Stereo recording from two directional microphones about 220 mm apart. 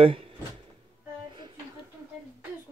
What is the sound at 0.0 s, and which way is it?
Speech, 25° right (ahead or behind).